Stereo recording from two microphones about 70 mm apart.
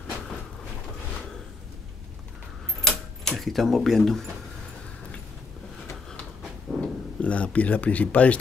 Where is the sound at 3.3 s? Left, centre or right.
Centre.